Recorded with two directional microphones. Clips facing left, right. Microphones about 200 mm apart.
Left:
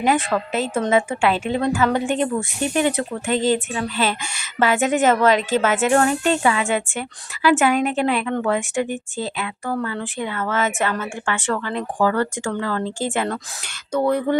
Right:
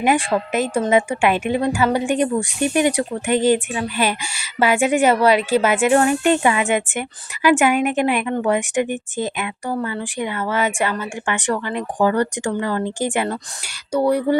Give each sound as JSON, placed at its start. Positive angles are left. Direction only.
{"t": 0.0, "sound": "a woman's voice", "side_deg": -15}